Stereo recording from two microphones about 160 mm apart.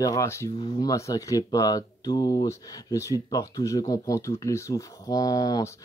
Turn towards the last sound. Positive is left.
turn(degrees=25)  # may be behind; listen again after turning